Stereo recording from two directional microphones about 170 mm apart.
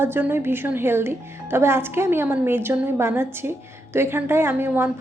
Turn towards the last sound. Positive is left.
turn(degrees=-15)  # may be behind; listen again after turning